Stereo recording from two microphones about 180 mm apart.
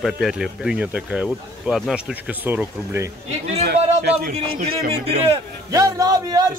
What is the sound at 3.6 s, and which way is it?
A man's voice, 65° right (ahead or behind).